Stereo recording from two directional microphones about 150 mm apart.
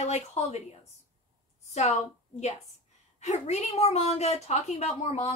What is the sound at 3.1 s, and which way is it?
A woman's voice, 45° left (ahead or behind).